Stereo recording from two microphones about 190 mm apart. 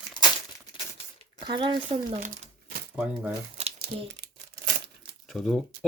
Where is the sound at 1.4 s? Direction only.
25° right (ahead or behind).